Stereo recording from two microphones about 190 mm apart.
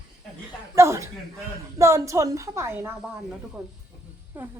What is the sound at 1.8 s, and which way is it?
A woman's voice, 15° right (ahead or behind).